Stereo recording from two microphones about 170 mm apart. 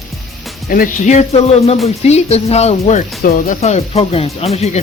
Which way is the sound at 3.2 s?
55° left (ahead or behind).